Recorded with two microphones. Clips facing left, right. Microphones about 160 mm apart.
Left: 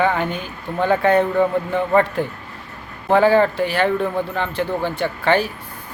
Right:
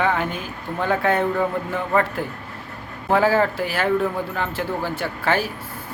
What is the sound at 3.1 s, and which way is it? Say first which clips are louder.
Speech: left 4 dB; 5° right (ahead or behind).